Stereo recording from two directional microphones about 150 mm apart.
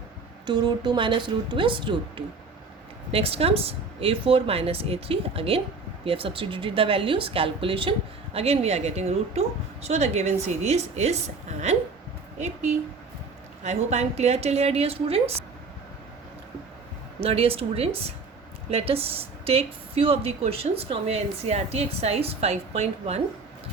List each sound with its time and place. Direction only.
0.4 s speech: 30° right (ahead or behind); by 11.8 s 45° right (ahead or behind)
13.7 s speech: 45° right (ahead or behind)
17.2 s speech: 40° right (ahead or behind)